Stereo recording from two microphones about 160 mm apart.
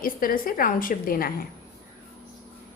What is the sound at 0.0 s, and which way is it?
A woman's voice, 65° left (ahead or behind).